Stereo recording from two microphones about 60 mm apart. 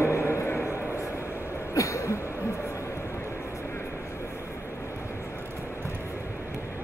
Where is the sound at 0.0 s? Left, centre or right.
Left.